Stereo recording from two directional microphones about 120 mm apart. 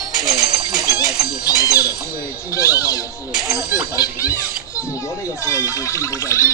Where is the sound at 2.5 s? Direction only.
30° left (ahead or behind).